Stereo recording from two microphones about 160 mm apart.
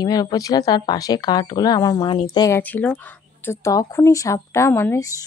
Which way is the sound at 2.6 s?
10° left (ahead or behind).